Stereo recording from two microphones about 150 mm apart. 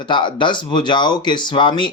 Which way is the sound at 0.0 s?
30° left (ahead or behind).